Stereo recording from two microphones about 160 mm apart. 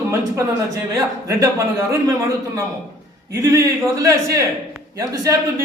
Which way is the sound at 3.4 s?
20° right (ahead or behind).